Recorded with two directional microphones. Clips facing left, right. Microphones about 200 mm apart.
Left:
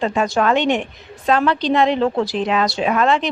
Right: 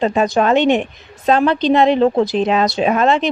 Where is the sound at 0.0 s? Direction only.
20° right (ahead or behind).